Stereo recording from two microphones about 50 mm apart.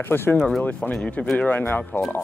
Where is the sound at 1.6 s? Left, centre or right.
Left.